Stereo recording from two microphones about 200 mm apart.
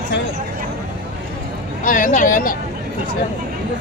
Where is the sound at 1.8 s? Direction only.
40° left (ahead or behind).